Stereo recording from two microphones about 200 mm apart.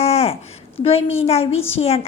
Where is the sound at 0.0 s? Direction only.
30° left (ahead or behind).